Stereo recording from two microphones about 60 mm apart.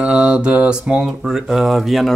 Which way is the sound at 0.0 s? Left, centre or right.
Centre.